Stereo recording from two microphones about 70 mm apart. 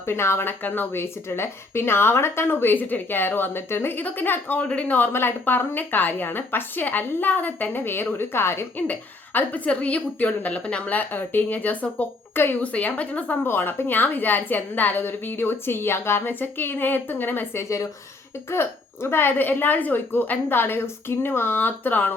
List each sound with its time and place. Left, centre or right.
0.1 s a woman's voice: left
8.9 s a woman's voice: left
12.6 s a woman's voice: centre
17.6 s speech: left
18.5 s a woman's voice: left